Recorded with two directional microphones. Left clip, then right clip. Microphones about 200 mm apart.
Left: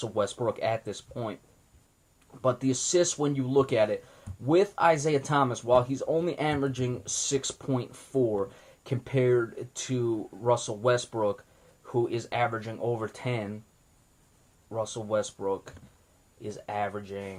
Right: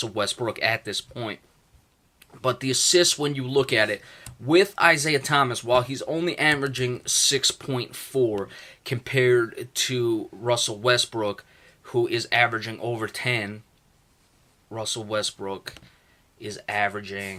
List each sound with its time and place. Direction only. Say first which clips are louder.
0.0 s speech: right 2 dB; 15° right (ahead or behind)
14.8 s speech: right 2 dB; 20° right (ahead or behind)